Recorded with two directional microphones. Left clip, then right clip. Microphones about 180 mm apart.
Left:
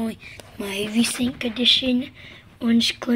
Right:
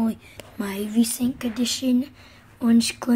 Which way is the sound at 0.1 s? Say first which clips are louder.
Right 1 dB; 15° right (ahead or behind).